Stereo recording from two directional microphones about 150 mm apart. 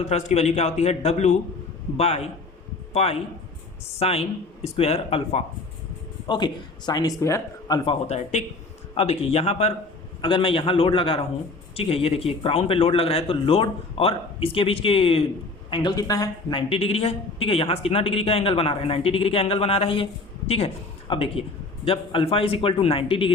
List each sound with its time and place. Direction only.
0.0 s a man's voice: 50° left (ahead or behind)
6.2 s speech: 30° left (ahead or behind)
7.9 s a man's voice: 45° left (ahead or behind)
15.7 s speech: 30° left (ahead or behind)
16.6 s a man's voice: 40° left (ahead or behind)
21.1 s a man's voice: 40° left (ahead or behind)